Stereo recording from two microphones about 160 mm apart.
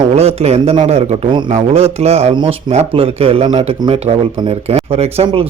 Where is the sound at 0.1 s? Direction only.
40° right (ahead or behind).